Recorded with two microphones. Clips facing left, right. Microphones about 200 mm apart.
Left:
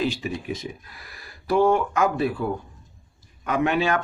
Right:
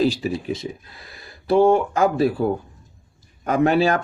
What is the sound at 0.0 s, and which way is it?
Speech, 35° right (ahead or behind).